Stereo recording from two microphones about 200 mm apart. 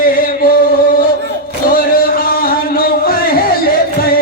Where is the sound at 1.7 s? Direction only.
45° left (ahead or behind).